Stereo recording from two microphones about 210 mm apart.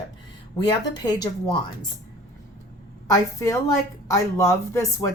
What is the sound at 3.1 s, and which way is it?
Speech, 15° left (ahead or behind).